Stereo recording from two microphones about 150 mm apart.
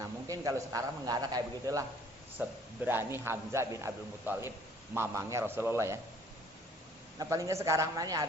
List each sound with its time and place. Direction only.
0.0 s a man's voice: 20° right (ahead or behind)
2.4 s a man's voice: 10° right (ahead or behind)
7.2 s a man's voice: 20° right (ahead or behind)